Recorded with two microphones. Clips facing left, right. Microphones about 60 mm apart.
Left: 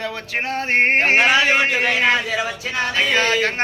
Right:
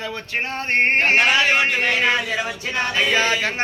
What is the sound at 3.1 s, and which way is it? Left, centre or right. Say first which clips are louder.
Speech: left 1 dB; right.